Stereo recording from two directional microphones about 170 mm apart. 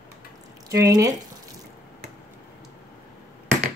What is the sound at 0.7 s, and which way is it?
Speech, 20° right (ahead or behind).